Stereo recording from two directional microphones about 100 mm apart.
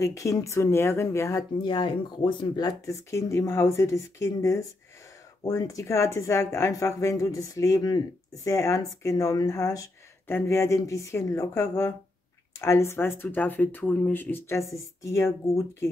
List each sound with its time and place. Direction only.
0.0 s speech: 30° left (ahead or behind)
1.6 s speech: 50° left (ahead or behind); by 14.2 s 15° left (ahead or behind)
14.3 s speech: 30° left (ahead or behind)